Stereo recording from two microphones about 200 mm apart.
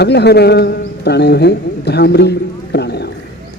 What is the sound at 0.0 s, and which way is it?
A man's voice, 55° left (ahead or behind).